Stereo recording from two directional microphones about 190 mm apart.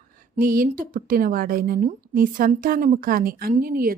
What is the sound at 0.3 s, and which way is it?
A woman's voice, 45° right (ahead or behind).